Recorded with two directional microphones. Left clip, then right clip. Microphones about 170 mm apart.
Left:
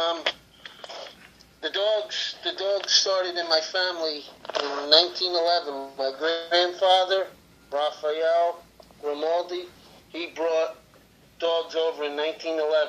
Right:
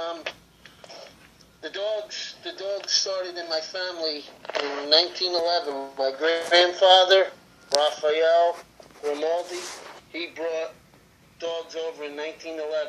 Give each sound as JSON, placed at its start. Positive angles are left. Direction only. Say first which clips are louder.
{"t": 0.0, "sound": "a sound", "louder": "left 6 dB", "side_deg": -15}
{"t": 4.0, "sound": "speech", "louder": "even", "side_deg": -45}
{"t": 10.1, "sound": "speech", "louder": "left 4 dB", "side_deg": -30}